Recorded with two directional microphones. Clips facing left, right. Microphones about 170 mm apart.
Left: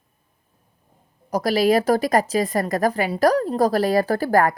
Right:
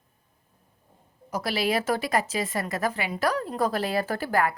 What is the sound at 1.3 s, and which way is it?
A woman's voice, 40° left (ahead or behind).